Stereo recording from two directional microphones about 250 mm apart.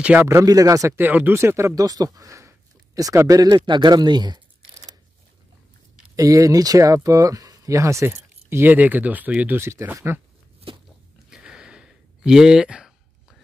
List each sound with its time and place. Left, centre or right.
0.0 s speech: centre
6.1 s speech: centre
11.2 s a sound: centre